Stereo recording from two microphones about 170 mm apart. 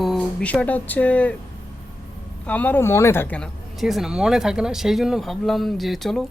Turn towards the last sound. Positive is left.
turn(degrees=0)  # may be behind; listen again after turning